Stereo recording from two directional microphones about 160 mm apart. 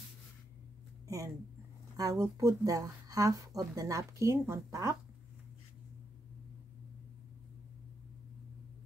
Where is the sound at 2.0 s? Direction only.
20° right (ahead or behind).